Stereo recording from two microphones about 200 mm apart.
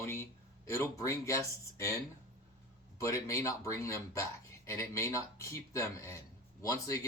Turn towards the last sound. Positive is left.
turn(degrees=15)  # may be behind; listen again after turning